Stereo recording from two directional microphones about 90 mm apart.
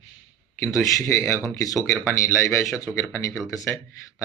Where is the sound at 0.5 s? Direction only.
30° left (ahead or behind).